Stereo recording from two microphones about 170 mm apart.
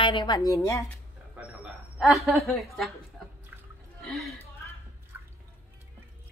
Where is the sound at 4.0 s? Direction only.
Centre (ahead or behind).